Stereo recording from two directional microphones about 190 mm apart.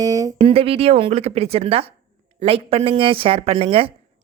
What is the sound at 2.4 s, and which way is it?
Mantra, 30° right (ahead or behind).